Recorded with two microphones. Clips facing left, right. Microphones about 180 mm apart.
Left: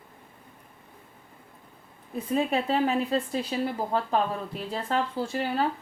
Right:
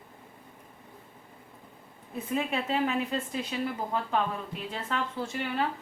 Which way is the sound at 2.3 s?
35° left (ahead or behind).